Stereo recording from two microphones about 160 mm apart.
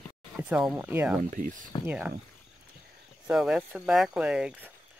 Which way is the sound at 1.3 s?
55° right (ahead or behind).